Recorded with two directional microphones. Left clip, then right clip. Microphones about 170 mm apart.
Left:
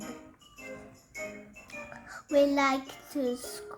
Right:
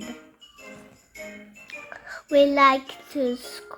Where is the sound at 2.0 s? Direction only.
40° right (ahead or behind).